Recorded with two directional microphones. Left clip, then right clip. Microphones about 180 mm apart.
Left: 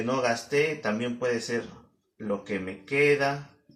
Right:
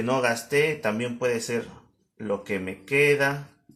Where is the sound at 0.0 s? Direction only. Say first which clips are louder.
Right 2 dB; 50° right (ahead or behind).